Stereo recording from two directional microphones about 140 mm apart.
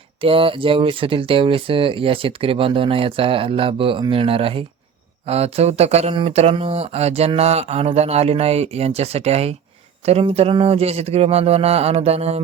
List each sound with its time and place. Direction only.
0.2 s speech: 40° right (ahead or behind)